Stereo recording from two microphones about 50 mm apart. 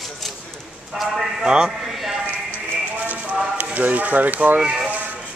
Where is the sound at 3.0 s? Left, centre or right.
Right.